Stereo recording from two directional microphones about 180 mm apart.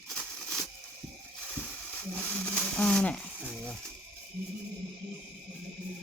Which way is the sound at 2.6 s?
5° left (ahead or behind).